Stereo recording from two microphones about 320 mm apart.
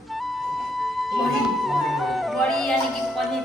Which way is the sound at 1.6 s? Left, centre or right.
Centre.